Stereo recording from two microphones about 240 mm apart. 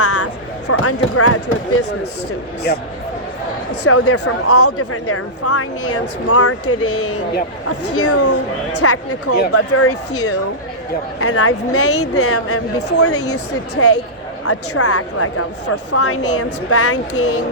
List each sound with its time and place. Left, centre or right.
0.0 s a sound: left
0.7 s speech: left
2.7 s speech: left
3.8 s speech: left